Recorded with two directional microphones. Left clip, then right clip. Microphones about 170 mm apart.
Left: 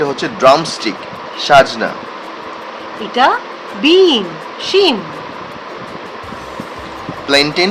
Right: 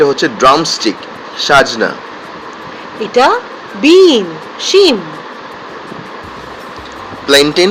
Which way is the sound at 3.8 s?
25° right (ahead or behind).